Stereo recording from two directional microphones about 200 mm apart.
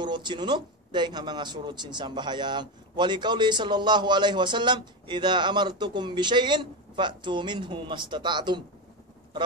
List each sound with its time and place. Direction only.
0.0 s speech: 20° right (ahead or behind)